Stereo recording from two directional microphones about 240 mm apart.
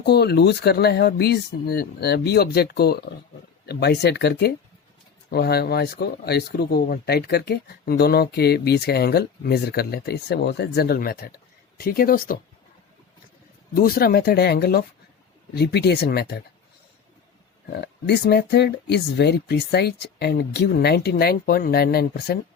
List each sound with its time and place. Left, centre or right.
0.0 s speech: left
13.7 s speech: left
17.7 s speech: left